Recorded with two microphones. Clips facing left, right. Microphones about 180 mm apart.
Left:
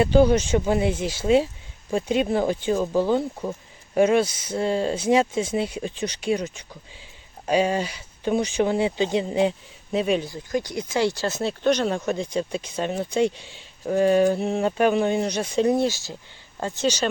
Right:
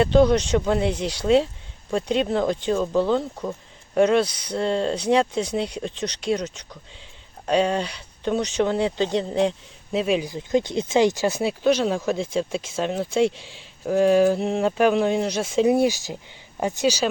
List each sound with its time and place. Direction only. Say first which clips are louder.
0.0 s speech: even; 5° left (ahead or behind)
10.2 s speech: right 4 dB; 20° right (ahead or behind)
11.6 s speech: right 1 dB; 5° right (ahead or behind)